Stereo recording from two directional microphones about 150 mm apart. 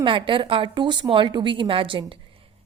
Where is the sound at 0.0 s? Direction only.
35° right (ahead or behind).